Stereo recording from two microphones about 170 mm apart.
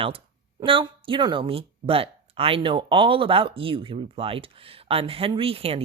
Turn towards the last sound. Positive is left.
turn(degrees=-35)  # may be behind; listen again after turning